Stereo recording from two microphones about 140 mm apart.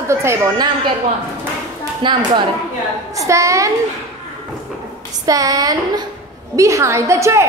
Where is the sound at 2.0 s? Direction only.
35° right (ahead or behind).